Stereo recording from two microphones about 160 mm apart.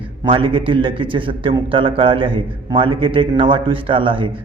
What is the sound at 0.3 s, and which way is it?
A man's voice, 35° right (ahead or behind).